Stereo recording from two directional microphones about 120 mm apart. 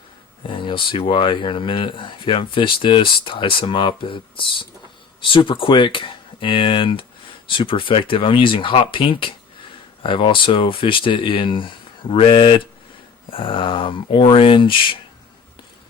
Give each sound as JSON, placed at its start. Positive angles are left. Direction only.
{"t": 0.4, "sound": "speech", "side_deg": 45}